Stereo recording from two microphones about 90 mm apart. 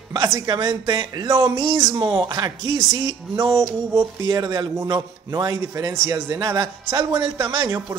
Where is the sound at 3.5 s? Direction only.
30° right (ahead or behind).